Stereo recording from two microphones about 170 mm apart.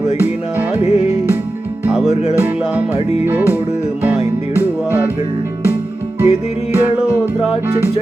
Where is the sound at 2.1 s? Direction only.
40° left (ahead or behind).